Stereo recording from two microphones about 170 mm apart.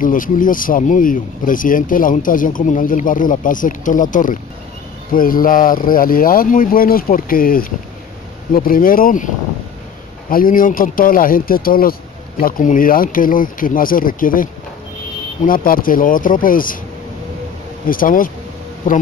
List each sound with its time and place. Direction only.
0.0 s speech: 50° left (ahead or behind)
10.3 s speech: 55° left (ahead or behind)
17.8 s speech: 55° left (ahead or behind)